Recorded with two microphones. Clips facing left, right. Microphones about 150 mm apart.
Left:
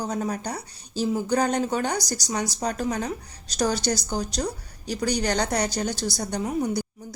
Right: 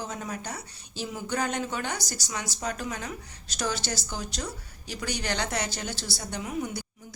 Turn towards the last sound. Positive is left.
turn(degrees=40)  # may be behind; listen again after turning